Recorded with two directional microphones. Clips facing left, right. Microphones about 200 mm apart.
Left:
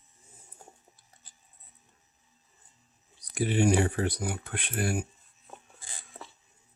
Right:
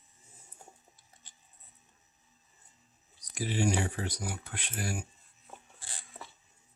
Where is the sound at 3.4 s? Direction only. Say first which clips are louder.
Left 6 dB; 60° left (ahead or behind).